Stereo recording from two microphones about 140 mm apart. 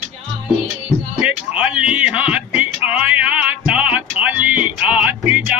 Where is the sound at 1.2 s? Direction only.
10° right (ahead or behind).